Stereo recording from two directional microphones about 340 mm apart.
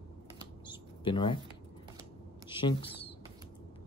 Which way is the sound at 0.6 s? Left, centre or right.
Centre.